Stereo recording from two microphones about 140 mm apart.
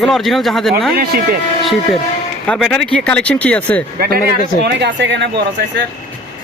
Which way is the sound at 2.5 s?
Centre (ahead or behind).